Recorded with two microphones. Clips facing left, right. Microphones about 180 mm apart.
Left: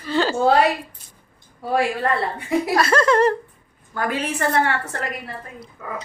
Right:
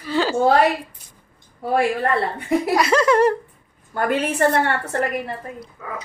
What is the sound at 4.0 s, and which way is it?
Speech, 55° right (ahead or behind).